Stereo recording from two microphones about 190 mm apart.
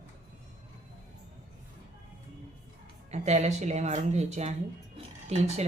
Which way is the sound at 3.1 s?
35° right (ahead or behind).